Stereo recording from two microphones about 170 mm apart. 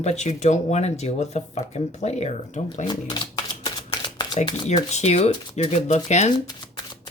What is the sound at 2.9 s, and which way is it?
Shuffling cards, 25° left (ahead or behind).